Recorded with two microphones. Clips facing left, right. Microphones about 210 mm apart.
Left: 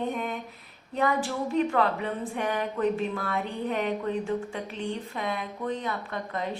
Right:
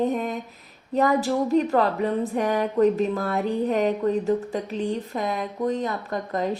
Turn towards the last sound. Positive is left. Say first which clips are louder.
# right 5 dB
turn(degrees=-40)  # may be behind; listen again after turning